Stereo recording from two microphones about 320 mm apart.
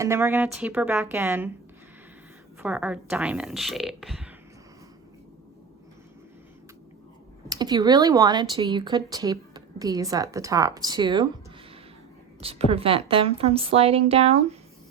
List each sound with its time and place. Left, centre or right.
0.0 s speech: centre
2.6 s a woman's voice: centre
7.5 s speech: centre
12.4 s speech: centre